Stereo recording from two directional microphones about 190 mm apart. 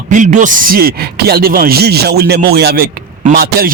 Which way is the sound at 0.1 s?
40° right (ahead or behind).